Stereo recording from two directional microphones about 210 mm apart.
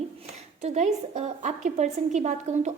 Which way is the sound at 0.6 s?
30° right (ahead or behind).